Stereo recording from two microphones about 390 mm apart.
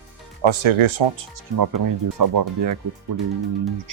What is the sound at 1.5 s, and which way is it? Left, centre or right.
Speech, right.